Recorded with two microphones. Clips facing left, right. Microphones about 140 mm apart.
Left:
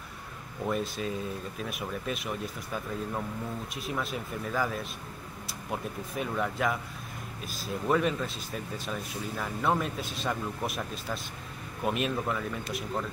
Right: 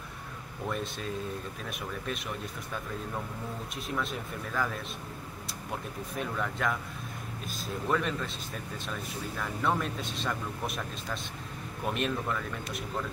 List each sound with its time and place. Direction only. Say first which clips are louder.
0.7 s speech: left 4 dB; 5° left (ahead or behind)
4.0 s speech: left 1 dB; 5° left (ahead or behind)
6.3 s speech: left 3 dB; 15° left (ahead or behind)
7.4 s speech: left 3 dB; 5° left (ahead or behind)
9.4 s speech: left 2 dB; 5° left (ahead or behind)